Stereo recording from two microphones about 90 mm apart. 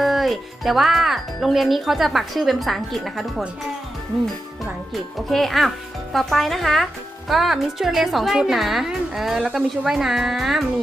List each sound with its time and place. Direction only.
0.0 s speech: centre (ahead or behind)
5.1 s speech: centre (ahead or behind)